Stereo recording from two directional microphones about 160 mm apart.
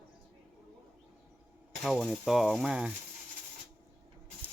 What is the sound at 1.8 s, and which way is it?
Speech, centre (ahead or behind).